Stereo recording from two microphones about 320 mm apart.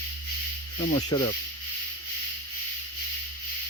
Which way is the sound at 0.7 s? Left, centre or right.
Centre.